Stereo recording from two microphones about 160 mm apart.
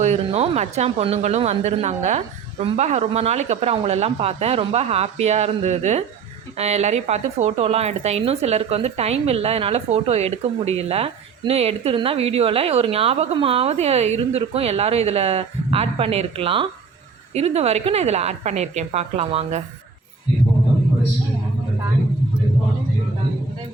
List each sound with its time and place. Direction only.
0.0 s a woman's voice: 45° right (ahead or behind)